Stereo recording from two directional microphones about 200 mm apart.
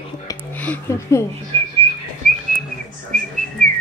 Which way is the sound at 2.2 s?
45° right (ahead or behind).